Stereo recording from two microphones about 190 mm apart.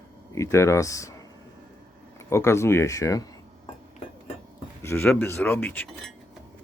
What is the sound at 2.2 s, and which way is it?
Speech, 15° left (ahead or behind).